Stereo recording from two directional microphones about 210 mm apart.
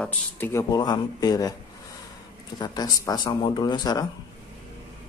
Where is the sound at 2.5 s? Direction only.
20° left (ahead or behind).